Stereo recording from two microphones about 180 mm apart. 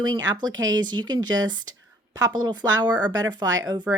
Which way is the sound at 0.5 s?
90° right.